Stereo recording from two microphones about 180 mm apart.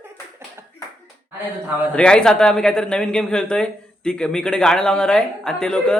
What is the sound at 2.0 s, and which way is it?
Speech, 5° left (ahead or behind).